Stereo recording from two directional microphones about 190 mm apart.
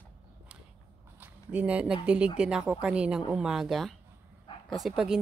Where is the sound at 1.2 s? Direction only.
10° right (ahead or behind).